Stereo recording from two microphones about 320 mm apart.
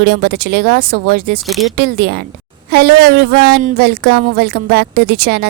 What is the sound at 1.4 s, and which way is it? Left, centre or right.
Speech, centre.